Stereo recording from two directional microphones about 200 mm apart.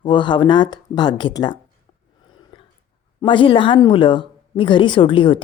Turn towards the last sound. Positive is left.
turn(degrees=25)  # may be behind; listen again after turning